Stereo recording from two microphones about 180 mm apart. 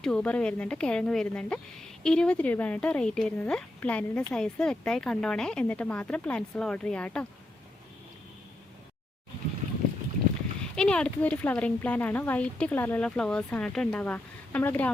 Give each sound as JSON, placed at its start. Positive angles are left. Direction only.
{"t": 0.0, "sound": "a woman's voice", "side_deg": 5}
{"t": 10.6, "sound": "speech", "side_deg": 5}